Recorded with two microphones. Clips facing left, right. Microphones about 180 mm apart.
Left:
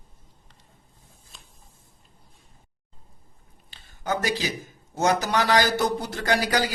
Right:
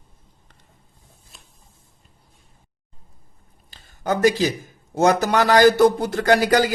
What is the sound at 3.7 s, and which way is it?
A man's voice, 50° right (ahead or behind).